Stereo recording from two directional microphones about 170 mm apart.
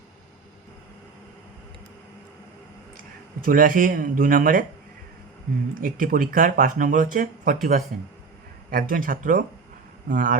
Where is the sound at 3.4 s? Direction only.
55° right (ahead or behind).